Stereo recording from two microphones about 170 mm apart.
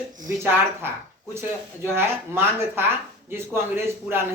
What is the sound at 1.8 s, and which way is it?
Speech, 15° right (ahead or behind).